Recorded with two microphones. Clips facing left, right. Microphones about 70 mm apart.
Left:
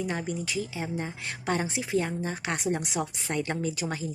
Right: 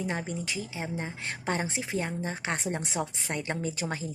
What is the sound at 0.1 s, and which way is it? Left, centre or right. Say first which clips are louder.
Speech: left 2 dB; right.